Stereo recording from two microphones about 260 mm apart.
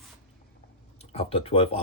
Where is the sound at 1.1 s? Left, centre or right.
Left.